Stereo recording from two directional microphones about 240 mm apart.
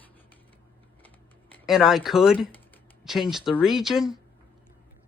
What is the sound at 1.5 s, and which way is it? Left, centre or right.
Speech, centre.